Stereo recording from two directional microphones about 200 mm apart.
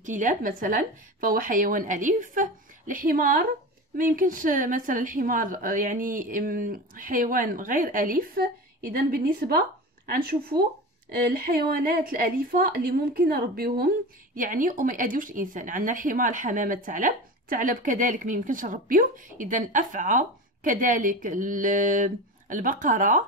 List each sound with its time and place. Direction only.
0.0 s a woman's voice: 40° right (ahead or behind)